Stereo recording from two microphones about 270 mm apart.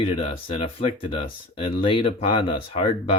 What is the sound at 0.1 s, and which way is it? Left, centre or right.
Speech, left.